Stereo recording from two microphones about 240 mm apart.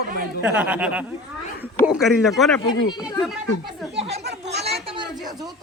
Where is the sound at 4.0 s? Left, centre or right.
Right.